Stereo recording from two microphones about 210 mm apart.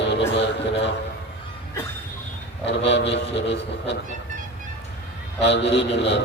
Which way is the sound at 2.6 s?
55° left (ahead or behind).